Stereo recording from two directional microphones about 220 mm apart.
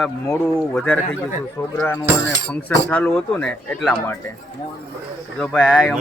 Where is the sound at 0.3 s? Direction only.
5° left (ahead or behind).